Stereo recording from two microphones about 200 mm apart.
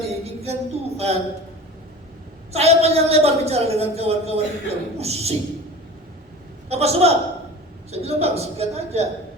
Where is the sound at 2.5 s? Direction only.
30° right (ahead or behind).